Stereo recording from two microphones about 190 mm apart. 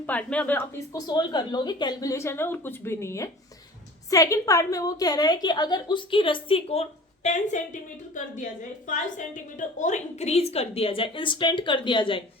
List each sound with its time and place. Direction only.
0.0 s a woman's voice: 5° left (ahead or behind); by 12.2 s 25° left (ahead or behind)